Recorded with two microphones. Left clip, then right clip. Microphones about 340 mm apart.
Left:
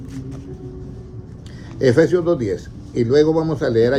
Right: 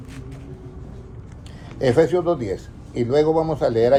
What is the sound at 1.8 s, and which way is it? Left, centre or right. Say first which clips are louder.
A man's voice: left 2 dB; centre.